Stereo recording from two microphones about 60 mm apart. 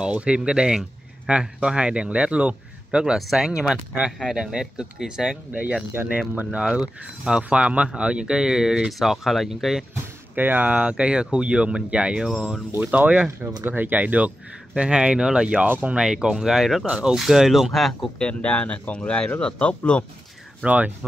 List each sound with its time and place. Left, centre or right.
0.0 s speech: centre
5.5 s speech: right; by 9.8 s centre
10.3 s speech: right; by 12.5 s centre
12.9 s speech: right; by 17.9 s centre
18.2 s speech: centre
20.6 s speech: right